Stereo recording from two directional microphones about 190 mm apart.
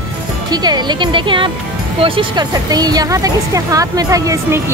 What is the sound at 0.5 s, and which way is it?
Speech, 20° right (ahead or behind).